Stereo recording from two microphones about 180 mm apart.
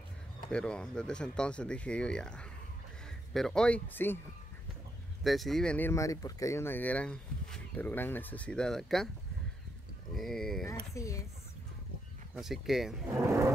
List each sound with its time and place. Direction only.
0.5 s speech: 5° left (ahead or behind)
5.2 s speech: centre (ahead or behind)
10.1 s speech: centre (ahead or behind)
11.0 s speech: 15° left (ahead or behind)
12.4 s speech: centre (ahead or behind)
13.1 s speech: 15° right (ahead or behind)